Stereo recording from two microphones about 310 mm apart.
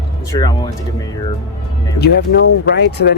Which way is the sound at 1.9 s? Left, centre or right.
Left.